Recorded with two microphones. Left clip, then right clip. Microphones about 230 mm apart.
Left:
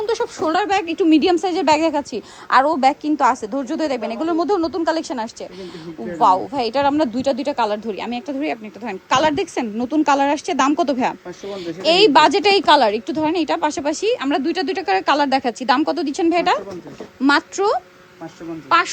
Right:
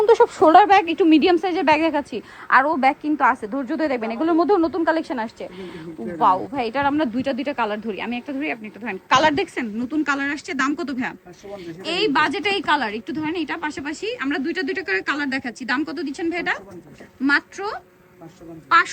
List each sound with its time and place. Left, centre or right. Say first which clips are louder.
0.0 s speech: right 7 dB; centre